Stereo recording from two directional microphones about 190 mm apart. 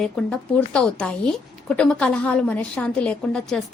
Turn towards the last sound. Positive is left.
turn(degrees=5)  # may be behind; listen again after turning